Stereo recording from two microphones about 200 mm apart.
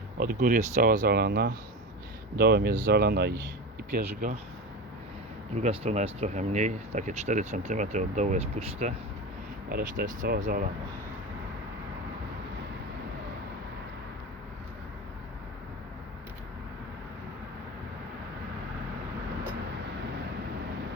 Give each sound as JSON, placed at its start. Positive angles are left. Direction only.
{"t": 0.2, "sound": "speech", "side_deg": -45}
{"t": 5.5, "sound": "speech", "side_deg": -35}
{"t": 9.6, "sound": "speech", "side_deg": -50}